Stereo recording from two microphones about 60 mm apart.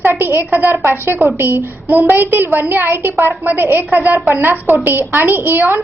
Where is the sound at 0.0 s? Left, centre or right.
Right.